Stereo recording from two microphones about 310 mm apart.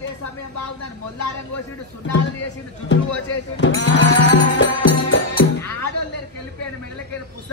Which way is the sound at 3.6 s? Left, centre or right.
Left.